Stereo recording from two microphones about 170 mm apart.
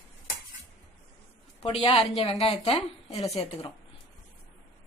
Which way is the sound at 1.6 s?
30° left (ahead or behind).